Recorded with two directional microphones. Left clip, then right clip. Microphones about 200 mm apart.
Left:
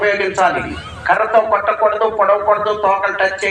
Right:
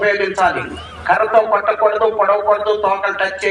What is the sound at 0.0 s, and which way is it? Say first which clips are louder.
A man's voice: even; 30° left (ahead or behind).